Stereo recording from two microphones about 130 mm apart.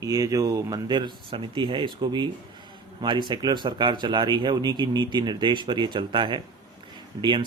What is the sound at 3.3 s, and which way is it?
Speech, 35° right (ahead or behind).